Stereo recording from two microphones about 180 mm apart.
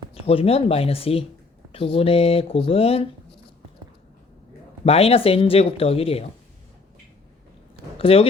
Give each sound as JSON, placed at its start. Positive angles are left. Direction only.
{"t": 0.1, "sound": "speech", "side_deg": 30}
{"t": 4.9, "sound": "speech", "side_deg": 35}
{"t": 7.9, "sound": "speech", "side_deg": 30}